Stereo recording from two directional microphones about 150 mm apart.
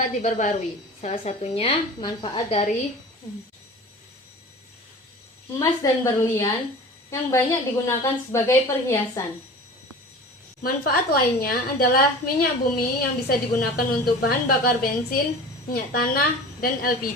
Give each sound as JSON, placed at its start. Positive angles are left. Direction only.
{"t": 0.0, "sound": "a woman's voice", "side_deg": 60}
{"t": 5.5, "sound": "a woman's voice", "side_deg": 20}
{"t": 10.6, "sound": "a woman's voice", "side_deg": 80}